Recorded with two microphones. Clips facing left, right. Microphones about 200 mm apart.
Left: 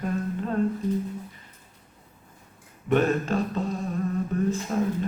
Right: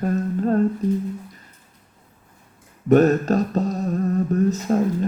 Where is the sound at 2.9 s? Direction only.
40° right (ahead or behind).